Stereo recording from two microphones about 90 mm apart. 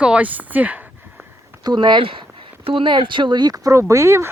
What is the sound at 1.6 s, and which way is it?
Speech, 55° right (ahead or behind).